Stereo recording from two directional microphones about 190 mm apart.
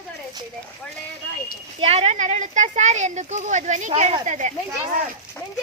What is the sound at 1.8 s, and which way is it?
Speech, 30° right (ahead or behind).